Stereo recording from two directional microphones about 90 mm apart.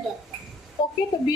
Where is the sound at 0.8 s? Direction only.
75° left (ahead or behind).